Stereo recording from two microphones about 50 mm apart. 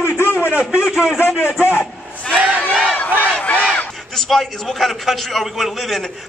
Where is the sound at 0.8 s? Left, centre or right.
Centre.